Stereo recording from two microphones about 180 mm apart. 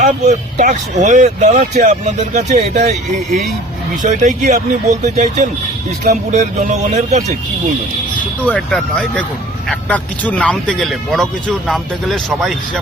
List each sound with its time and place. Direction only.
0.0 s speech: 45° right (ahead or behind)
8.4 s speech: 5° left (ahead or behind)